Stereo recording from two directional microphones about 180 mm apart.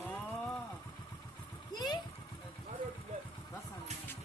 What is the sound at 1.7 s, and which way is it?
Speech, 25° left (ahead or behind).